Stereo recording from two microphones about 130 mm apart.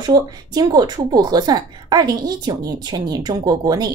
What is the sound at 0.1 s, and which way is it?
A woman's voice, 30° right (ahead or behind).